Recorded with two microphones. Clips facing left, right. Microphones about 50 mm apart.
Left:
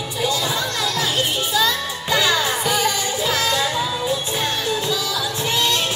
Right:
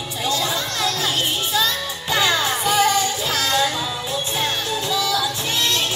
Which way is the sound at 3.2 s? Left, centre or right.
Left.